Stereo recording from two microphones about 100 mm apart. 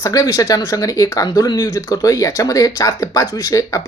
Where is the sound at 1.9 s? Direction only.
35° left (ahead or behind).